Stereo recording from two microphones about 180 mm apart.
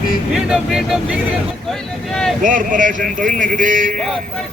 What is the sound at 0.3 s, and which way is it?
Speech, 5° right (ahead or behind).